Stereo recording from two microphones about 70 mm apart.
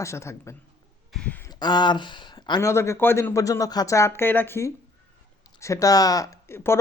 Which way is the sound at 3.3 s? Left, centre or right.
Left.